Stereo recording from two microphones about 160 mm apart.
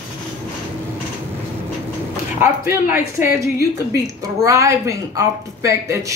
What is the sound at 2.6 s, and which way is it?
Speech, 55° left (ahead or behind).